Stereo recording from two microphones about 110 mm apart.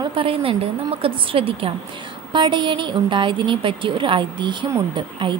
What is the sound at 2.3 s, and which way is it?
Speech, 45° right (ahead or behind).